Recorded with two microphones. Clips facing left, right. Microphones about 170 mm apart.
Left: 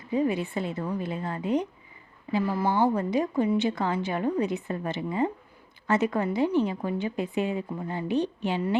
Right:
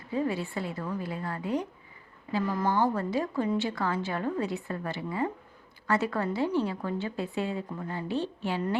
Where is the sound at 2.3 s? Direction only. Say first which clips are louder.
Left 2 dB; 10° left (ahead or behind).